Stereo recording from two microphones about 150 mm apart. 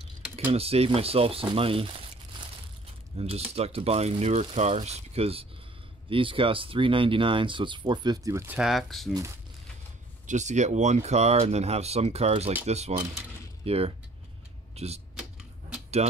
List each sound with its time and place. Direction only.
0.5 s speech: 40° right (ahead or behind)
3.2 s speech: 40° right (ahead or behind); by 8.5 s 20° right (ahead or behind)
8.5 s speech: centre (ahead or behind)
10.2 s speech: 50° right (ahead or behind)